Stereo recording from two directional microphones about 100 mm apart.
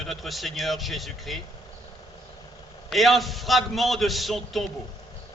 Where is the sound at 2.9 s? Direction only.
Centre (ahead or behind).